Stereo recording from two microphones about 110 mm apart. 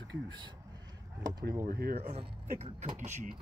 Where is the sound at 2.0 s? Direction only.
65° right (ahead or behind); by 3.3 s 90° right.